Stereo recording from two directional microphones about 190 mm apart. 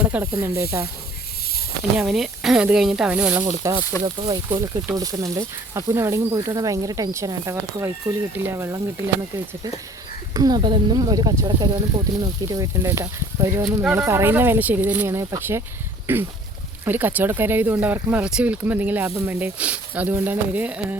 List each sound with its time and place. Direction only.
0.0 s speech: 10° right (ahead or behind)
2.0 s speech: centre (ahead or behind)
10.3 s speech: 20° right (ahead or behind)